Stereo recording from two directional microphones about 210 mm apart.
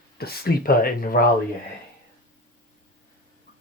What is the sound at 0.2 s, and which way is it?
Speech, 45° left (ahead or behind).